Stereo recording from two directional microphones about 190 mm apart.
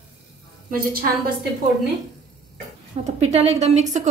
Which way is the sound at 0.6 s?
50° right (ahead or behind).